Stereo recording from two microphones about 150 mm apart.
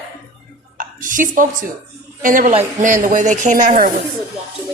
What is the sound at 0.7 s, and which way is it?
A woman's voice, 60° right (ahead or behind).